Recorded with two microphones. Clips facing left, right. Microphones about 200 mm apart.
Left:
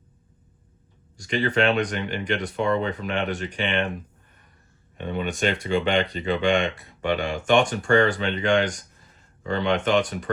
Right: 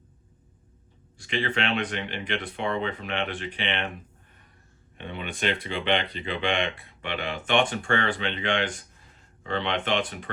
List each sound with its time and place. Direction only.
1.2 s speech: 40° left (ahead or behind)
4.9 s speech: 45° left (ahead or behind)